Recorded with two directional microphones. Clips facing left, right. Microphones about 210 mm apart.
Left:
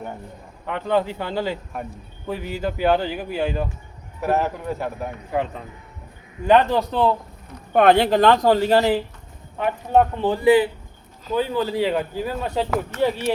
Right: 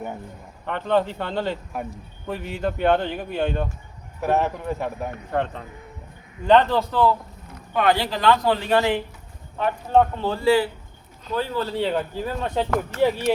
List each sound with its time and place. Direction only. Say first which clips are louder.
0.6 s a man's voice: even; 5° left (ahead or behind); by 7.2 s 20° left (ahead or behind)
7.7 s speech: left 6 dB; 55° left (ahead or behind); by 9.0 s 35° left (ahead or behind)
9.6 s speech: left 1 dB; 10° left (ahead or behind)